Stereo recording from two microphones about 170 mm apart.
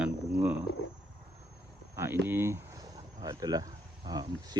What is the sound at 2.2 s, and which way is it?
Speech, 15° right (ahead or behind).